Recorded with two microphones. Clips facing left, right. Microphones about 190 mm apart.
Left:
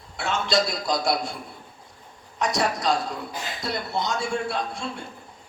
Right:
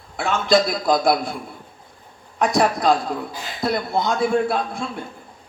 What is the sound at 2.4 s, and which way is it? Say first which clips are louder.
A man's voice: right 6 dB; 55° right (ahead or behind).